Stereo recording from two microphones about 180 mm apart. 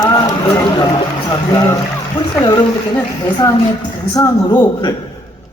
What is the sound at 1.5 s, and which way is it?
Speech, 20° left (ahead or behind).